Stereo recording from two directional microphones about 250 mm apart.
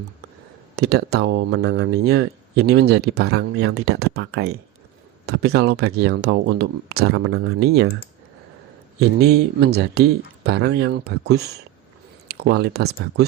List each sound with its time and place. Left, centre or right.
0.8 s speech: right
9.0 s speech: right